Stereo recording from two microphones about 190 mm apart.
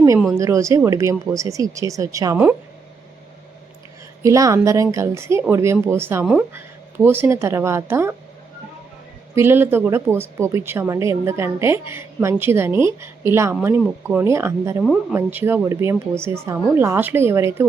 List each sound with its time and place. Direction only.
0.3 s a woman's voice: 15° right (ahead or behind)
4.2 s a woman's voice: 15° right (ahead or behind)
9.3 s a woman's voice: 10° right (ahead or behind)